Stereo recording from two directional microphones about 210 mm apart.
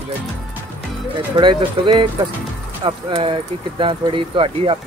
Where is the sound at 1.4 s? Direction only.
20° right (ahead or behind).